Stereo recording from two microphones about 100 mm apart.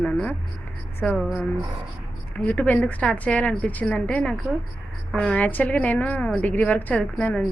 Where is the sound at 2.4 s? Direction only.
15° left (ahead or behind).